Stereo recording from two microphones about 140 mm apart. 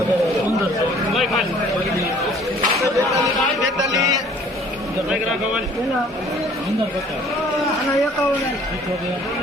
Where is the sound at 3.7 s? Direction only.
25° right (ahead or behind).